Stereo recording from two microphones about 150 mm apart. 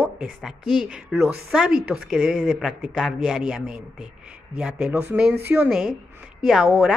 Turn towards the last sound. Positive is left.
turn(degrees=-5)  # may be behind; listen again after turning